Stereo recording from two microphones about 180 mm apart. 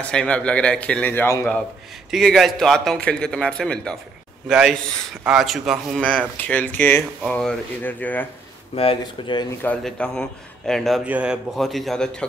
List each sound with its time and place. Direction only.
0.1 s speech: 5° left (ahead or behind)
2.0 s a man's voice: centre (ahead or behind)
8.7 s speech: 30° left (ahead or behind)
9.6 s a man's voice: 10° left (ahead or behind)